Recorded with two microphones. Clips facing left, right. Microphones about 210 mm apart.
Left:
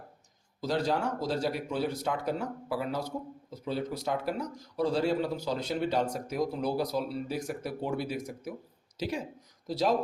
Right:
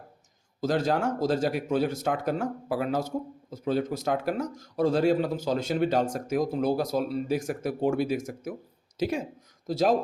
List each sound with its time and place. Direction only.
0.6 s speech: 50° right (ahead or behind)